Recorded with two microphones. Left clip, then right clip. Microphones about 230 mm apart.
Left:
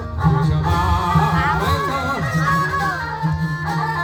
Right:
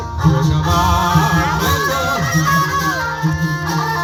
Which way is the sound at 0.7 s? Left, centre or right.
Right.